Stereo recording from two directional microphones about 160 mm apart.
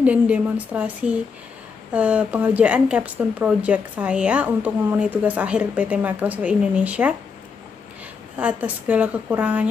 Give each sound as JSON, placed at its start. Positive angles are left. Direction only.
{"t": 0.0, "sound": "a woman's voice", "side_deg": -10}
{"t": 8.4, "sound": "a woman's voice", "side_deg": -10}